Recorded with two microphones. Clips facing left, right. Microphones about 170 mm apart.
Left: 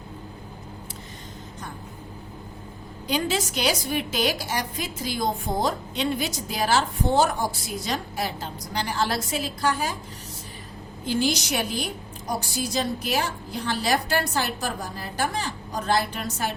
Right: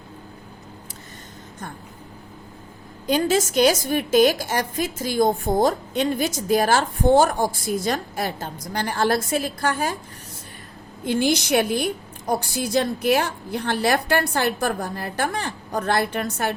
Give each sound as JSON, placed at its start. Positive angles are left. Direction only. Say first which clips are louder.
{"t": 3.1, "sound": "a woman's voice", "louder": "right 6 dB", "side_deg": -45}
{"t": 11.0, "sound": "a woman's voice", "louder": "right 4 dB", "side_deg": -60}